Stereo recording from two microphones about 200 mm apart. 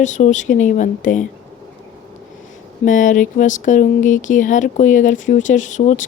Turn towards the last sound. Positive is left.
turn(degrees=40)  # may be behind; listen again after turning